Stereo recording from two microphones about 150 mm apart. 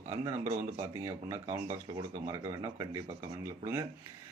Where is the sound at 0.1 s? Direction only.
20° right (ahead or behind).